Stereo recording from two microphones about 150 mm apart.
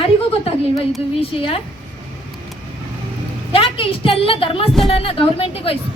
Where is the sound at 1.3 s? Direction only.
40° left (ahead or behind).